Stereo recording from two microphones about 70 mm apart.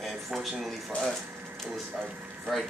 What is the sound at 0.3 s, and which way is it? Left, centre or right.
Speech, centre.